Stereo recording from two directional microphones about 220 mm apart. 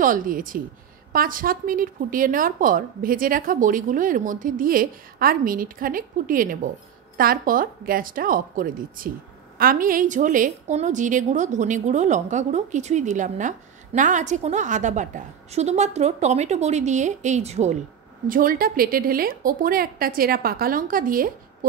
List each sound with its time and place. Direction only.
0.0 s a woman's voice: 40° right (ahead or behind)